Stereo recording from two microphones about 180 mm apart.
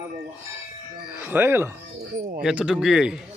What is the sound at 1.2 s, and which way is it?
Speech, 10° right (ahead or behind).